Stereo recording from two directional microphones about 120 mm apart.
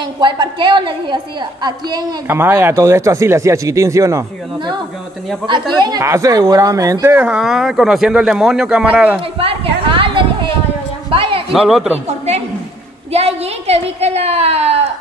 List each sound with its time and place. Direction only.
0.0 s a woman's voice: 40° right (ahead or behind)
2.2 s speech: 20° right (ahead or behind)
5.5 s a woman's voice: 35° right (ahead or behind)
7.2 s speech: 5° right (ahead or behind)
9.4 s a sound: 50° right (ahead or behind)
11.5 s speech: 5° right (ahead or behind)
13.1 s a woman's voice: 60° right (ahead or behind)